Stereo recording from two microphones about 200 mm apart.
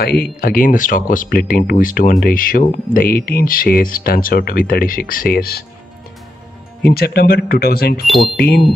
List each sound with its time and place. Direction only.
0.0 s speech: 50° left (ahead or behind)
6.9 s speech: 50° left (ahead or behind)